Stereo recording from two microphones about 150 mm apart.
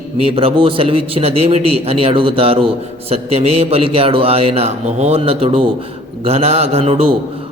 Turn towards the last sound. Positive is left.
turn(degrees=-40)  # may be behind; listen again after turning